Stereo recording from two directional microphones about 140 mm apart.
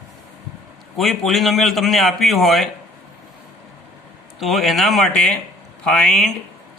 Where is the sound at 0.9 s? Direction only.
Centre (ahead or behind).